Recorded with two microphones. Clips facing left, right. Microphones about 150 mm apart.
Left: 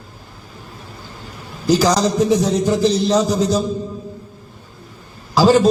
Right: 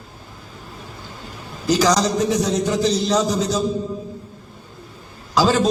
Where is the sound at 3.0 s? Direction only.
10° left (ahead or behind).